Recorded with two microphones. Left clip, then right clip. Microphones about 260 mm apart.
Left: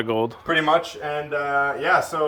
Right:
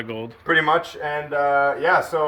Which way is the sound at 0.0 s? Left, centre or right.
Centre.